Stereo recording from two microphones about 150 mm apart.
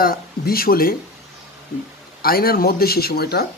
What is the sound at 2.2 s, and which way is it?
Speech, 85° left.